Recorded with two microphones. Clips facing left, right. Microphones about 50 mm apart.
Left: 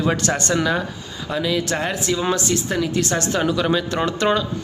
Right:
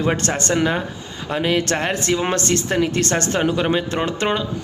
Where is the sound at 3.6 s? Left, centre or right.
Right.